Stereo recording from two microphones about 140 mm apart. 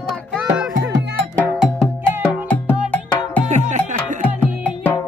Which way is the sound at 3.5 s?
55° right (ahead or behind).